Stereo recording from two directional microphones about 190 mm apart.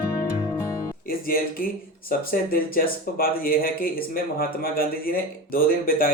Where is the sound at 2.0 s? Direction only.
50° left (ahead or behind).